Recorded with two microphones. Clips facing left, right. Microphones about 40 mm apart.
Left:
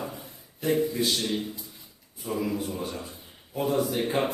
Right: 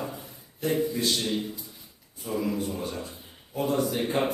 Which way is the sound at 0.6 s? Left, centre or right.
Centre.